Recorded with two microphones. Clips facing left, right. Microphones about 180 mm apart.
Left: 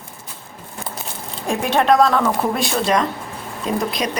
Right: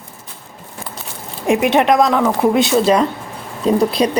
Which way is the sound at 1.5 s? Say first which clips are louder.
Right 4 dB; 20° right (ahead or behind).